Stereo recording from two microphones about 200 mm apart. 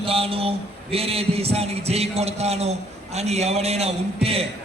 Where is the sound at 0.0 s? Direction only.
30° right (ahead or behind).